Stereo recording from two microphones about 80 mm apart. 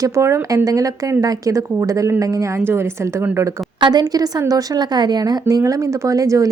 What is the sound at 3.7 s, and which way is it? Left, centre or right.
A woman's voice, right.